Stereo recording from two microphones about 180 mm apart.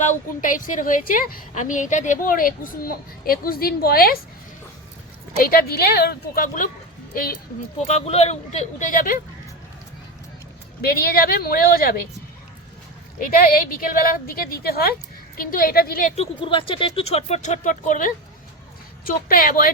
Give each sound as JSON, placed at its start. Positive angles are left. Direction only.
{"t": 0.0, "sound": "a woman's voice", "side_deg": 45}
{"t": 5.4, "sound": "a woman's voice", "side_deg": 55}
{"t": 7.8, "sound": "speech", "side_deg": 35}
{"t": 10.8, "sound": "a woman's voice", "side_deg": 55}
{"t": 13.1, "sound": "a woman's voice", "side_deg": 50}